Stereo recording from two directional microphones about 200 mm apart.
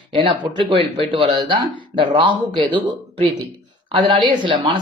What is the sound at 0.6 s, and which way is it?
Speech, 25° right (ahead or behind).